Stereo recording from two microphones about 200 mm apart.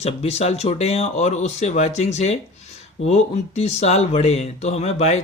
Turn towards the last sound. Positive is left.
turn(degrees=35)  # may be behind; listen again after turning